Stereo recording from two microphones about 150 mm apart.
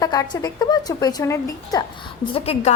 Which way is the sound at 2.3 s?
40° left (ahead or behind).